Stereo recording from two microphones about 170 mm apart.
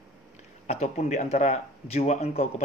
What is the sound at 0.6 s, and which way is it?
Speech, 40° left (ahead or behind).